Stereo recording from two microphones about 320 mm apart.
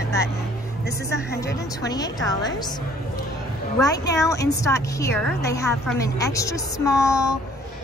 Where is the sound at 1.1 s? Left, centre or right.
Left.